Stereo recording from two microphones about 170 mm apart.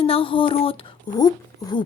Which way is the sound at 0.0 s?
30° left (ahead or behind).